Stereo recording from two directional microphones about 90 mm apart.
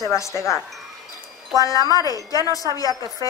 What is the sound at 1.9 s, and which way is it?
Speech, 40° left (ahead or behind).